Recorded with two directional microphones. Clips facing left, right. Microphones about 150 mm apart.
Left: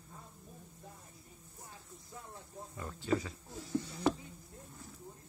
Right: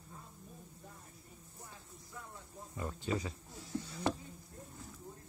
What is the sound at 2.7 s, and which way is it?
Speech, 20° right (ahead or behind).